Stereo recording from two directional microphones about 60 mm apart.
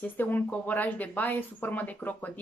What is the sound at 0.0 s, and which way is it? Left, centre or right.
A woman's voice, left.